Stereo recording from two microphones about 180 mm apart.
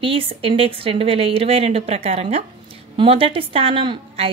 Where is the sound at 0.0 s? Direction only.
30° right (ahead or behind).